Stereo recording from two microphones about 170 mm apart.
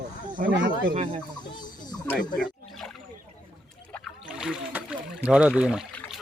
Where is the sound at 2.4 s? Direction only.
Centre (ahead or behind).